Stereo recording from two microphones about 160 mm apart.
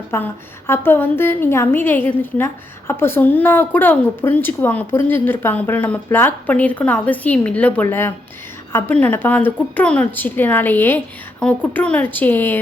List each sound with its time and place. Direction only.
0.1 s a woman's voice: 15° left (ahead or behind)